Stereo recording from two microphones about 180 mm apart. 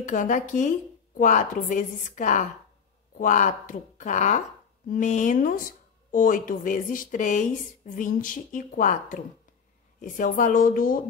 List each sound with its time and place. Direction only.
0.0 s a woman's voice: 45° left (ahead or behind)